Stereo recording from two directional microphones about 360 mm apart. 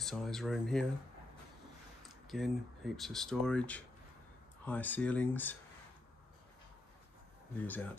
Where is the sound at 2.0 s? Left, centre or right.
Centre.